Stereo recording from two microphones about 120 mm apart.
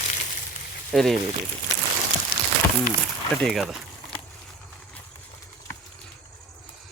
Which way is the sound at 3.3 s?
Centre (ahead or behind).